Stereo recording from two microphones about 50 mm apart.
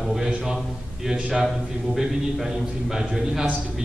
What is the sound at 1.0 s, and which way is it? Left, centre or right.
A man's voice, centre.